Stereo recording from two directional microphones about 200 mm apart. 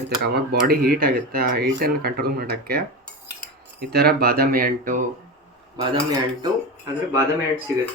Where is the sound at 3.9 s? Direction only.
50° right (ahead or behind).